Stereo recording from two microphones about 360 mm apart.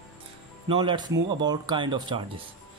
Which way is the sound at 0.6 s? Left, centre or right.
Centre.